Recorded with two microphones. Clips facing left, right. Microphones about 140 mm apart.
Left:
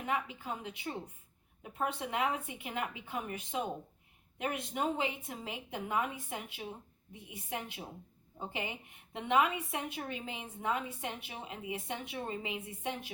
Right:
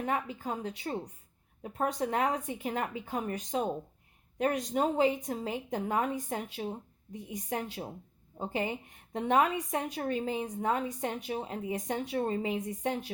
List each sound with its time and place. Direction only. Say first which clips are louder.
0.0 s a woman's voice: right 4 dB; 40° right (ahead or behind)